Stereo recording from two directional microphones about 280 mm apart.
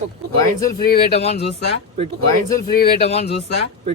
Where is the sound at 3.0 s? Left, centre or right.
Left.